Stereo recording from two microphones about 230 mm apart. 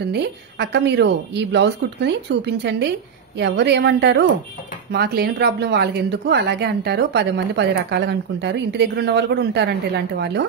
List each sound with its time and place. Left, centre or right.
0.0 s speech: right